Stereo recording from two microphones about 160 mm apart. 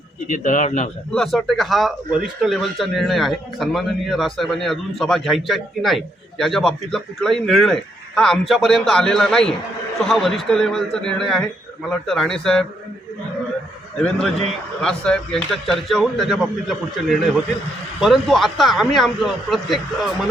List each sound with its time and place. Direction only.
0.3 s speech: 55° left (ahead or behind)
1.1 s speech: 5° left (ahead or behind)
14.8 s speech: 5° left (ahead or behind)